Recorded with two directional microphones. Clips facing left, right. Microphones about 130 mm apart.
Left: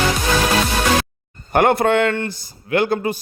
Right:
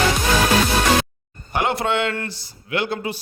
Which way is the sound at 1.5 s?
55° left (ahead or behind).